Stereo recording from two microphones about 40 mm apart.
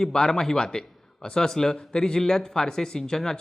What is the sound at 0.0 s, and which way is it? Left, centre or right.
Speech, centre.